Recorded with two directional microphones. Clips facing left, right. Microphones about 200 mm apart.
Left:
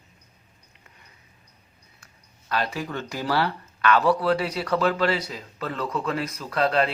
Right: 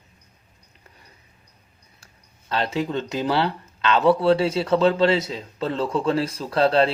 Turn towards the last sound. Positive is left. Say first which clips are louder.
# right 4 dB
turn(degrees=-30)  # may be behind; listen again after turning